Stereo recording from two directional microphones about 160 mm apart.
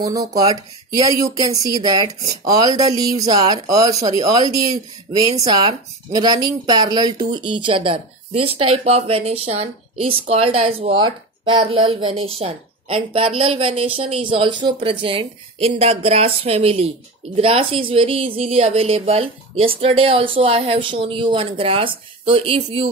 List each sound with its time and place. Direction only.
0.0 s speech: 20° right (ahead or behind)